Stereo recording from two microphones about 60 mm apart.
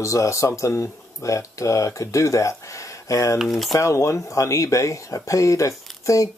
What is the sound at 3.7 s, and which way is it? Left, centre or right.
Speech, left.